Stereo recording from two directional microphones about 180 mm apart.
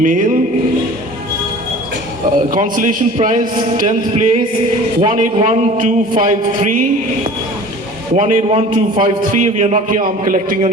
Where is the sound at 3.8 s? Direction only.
35° right (ahead or behind).